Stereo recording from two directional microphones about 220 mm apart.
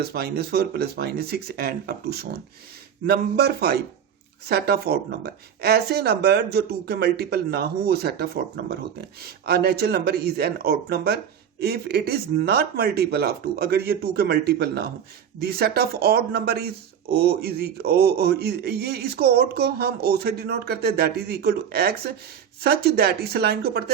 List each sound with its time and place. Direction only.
0.0 s a man's voice: 45° right (ahead or behind)